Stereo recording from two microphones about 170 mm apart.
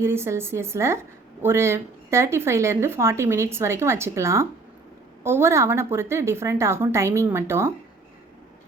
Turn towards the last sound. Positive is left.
turn(degrees=-15)  # may be behind; listen again after turning